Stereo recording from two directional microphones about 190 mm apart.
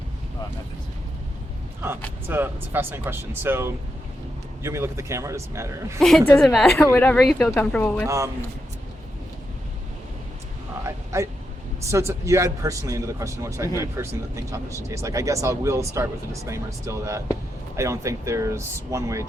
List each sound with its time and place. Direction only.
2.2 s speech: 10° right (ahead or behind)
6.0 s a woman's voice: centre (ahead or behind)
8.0 s speech: 15° right (ahead or behind)
10.8 s a sound: 15° right (ahead or behind)
11.9 s speech: 15° right (ahead or behind)